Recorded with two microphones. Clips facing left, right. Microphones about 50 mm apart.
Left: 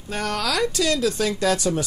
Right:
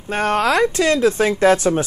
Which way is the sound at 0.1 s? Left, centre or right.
Right.